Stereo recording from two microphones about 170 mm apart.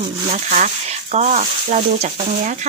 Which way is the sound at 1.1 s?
40° right (ahead or behind).